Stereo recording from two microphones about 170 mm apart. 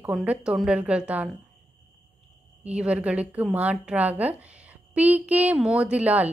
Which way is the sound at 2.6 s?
5° right (ahead or behind).